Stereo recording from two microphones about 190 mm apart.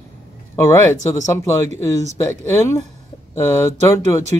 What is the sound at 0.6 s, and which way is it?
Speech, 15° left (ahead or behind).